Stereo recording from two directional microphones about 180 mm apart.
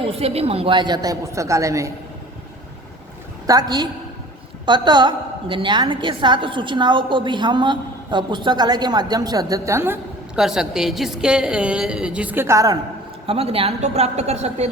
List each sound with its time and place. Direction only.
0.0 s a woman's voice: 35° right (ahead or behind); by 1.9 s 15° right (ahead or behind)
3.4 s a woman's voice: 20° right (ahead or behind)
13.2 s a woman's voice: 35° right (ahead or behind)